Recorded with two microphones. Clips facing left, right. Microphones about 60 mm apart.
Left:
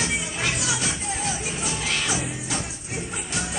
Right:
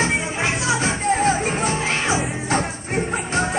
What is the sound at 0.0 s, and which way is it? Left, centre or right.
Music, right.